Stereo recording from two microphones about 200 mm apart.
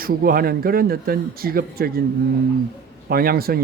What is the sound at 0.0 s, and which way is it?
Speech, 45° right (ahead or behind).